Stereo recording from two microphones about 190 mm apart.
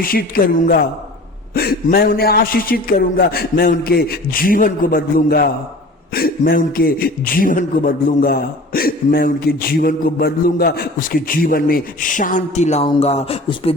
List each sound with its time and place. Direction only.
0.0 s a man's voice: 50° left (ahead or behind); by 13.7 s 30° left (ahead or behind)